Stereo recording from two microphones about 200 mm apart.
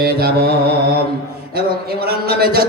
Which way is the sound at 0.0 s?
50° right (ahead or behind).